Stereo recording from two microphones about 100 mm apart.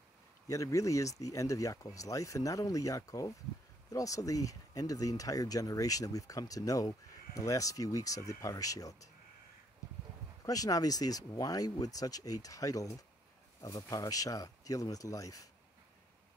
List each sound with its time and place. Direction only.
0.5 s speech: 35° left (ahead or behind)
10.4 s speech: 35° left (ahead or behind)